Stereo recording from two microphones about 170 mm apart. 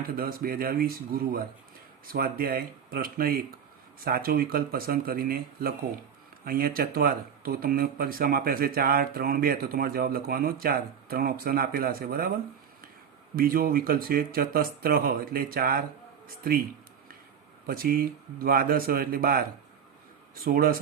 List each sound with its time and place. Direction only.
0.2 s speech: 60° right (ahead or behind)
13.3 s speech: 60° right (ahead or behind)
17.7 s speech: 60° right (ahead or behind)